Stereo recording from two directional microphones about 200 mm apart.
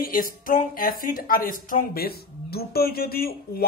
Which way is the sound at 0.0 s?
45° left (ahead or behind).